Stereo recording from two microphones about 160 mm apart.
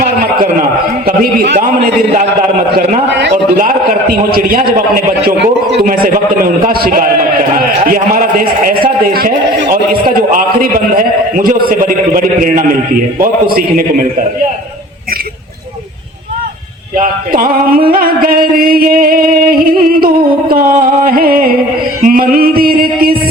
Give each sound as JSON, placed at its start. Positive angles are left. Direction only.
{"t": 0.0, "sound": "a sound", "side_deg": -65}
{"t": 1.0, "sound": "music", "side_deg": -65}
{"t": 3.1, "sound": "a man's voice", "side_deg": -90}
{"t": 4.3, "sound": "music", "side_deg": -65}
{"t": 4.9, "sound": "a man's voice", "side_deg": -90}
{"t": 6.7, "sound": "music", "side_deg": -65}
{"t": 17.0, "sound": "music", "side_deg": -60}